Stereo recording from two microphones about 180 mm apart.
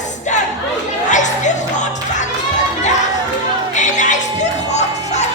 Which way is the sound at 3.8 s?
45° left (ahead or behind).